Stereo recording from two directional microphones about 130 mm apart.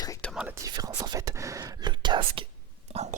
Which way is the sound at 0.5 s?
25° right (ahead or behind).